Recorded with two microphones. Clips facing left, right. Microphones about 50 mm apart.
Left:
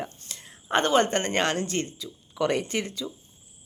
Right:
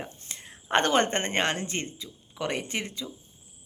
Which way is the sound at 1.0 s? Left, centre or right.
Right.